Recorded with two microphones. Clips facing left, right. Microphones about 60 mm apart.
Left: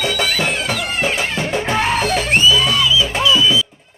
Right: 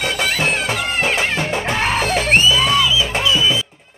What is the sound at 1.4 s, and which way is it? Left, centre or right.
Music, centre.